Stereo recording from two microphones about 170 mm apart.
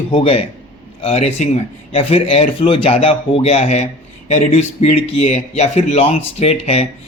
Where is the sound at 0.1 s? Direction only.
35° left (ahead or behind).